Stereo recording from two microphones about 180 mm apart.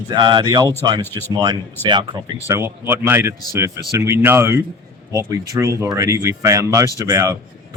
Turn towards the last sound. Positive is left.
turn(degrees=-15)  # may be behind; listen again after turning